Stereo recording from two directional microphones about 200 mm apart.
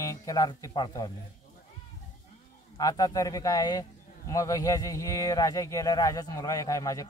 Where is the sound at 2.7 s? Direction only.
20° left (ahead or behind).